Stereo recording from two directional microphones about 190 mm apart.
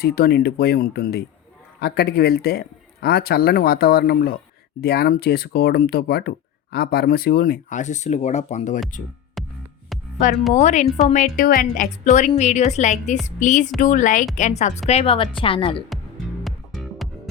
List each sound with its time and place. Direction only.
0.0 s speech: 55° left (ahead or behind); by 8.8 s 40° left (ahead or behind)
9.4 s music: centre (ahead or behind)
10.6 s a woman's voice: 40° left (ahead or behind)
16.4 s music: centre (ahead or behind)